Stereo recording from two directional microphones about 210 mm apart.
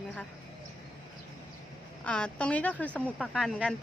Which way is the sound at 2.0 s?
5° left (ahead or behind).